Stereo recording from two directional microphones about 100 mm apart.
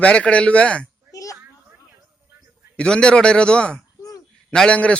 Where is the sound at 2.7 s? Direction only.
10° left (ahead or behind).